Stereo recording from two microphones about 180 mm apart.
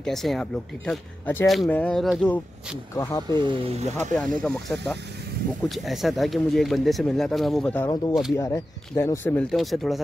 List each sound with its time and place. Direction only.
0.0 s speech: centre (ahead or behind)
3.0 s speech: 20° left (ahead or behind)
3.3 s speech: 25° right (ahead or behind)
4.1 s speech: 5° left (ahead or behind)
8.1 s speech: centre (ahead or behind)
8.4 s speech: 15° left (ahead or behind); by 10.0 s centre (ahead or behind)